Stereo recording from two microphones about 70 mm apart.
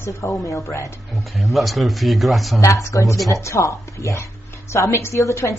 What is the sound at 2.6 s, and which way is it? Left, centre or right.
A woman's voice, left.